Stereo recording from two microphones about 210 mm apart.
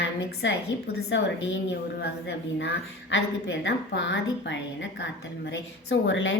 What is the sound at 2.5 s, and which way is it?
A woman's voice, 60° left (ahead or behind).